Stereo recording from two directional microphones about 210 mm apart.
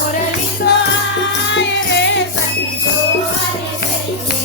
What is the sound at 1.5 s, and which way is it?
Music, 55° left (ahead or behind).